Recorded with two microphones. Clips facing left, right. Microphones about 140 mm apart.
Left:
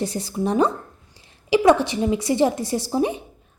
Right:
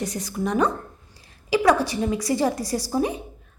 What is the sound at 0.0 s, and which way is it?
A woman's voice, 30° left (ahead or behind).